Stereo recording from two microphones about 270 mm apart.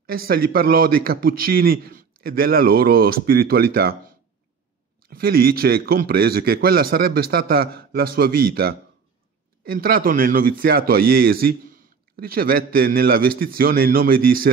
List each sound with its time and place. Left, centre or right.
0.3 s a man's voice: right
5.1 s a man's voice: right